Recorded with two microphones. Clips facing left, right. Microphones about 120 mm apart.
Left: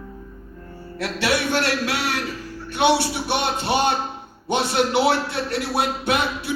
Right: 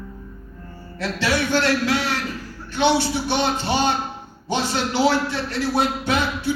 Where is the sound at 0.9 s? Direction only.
60° left (ahead or behind).